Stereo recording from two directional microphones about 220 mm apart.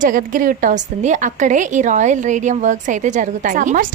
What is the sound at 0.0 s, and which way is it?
A woman's voice, 35° right (ahead or behind).